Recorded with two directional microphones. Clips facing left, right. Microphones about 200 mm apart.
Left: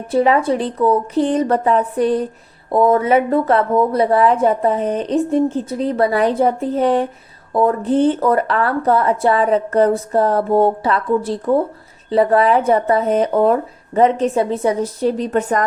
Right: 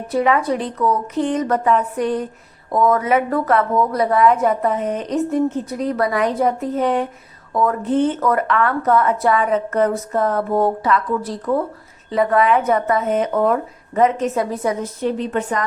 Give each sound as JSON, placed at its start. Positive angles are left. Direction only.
{"t": 0.1, "sound": "speech", "side_deg": 30}